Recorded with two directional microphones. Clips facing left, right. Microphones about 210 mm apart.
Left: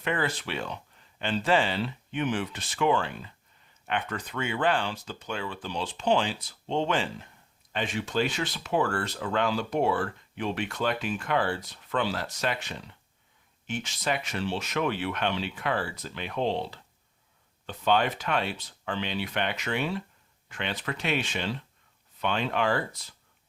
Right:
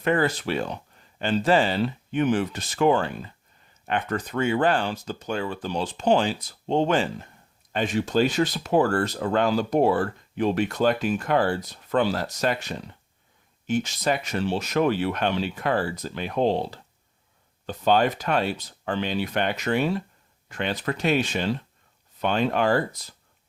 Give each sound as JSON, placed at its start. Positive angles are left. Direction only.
{"t": 0.0, "sound": "speech", "side_deg": -40}